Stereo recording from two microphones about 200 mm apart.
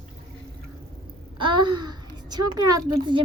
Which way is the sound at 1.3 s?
25° right (ahead or behind).